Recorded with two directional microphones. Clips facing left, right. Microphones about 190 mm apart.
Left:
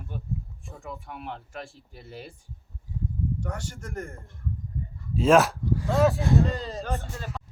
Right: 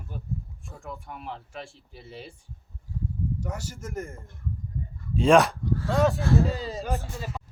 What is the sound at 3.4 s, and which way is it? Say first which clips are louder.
A man's voice: even; 5° right (ahead or behind).